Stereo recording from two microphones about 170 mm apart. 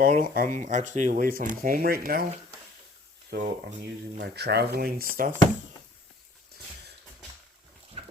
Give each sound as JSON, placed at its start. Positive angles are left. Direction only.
{"t": 0.0, "sound": "speech", "side_deg": -50}
{"t": 3.3, "sound": "speech", "side_deg": -70}
{"t": 8.0, "sound": "horse", "side_deg": -35}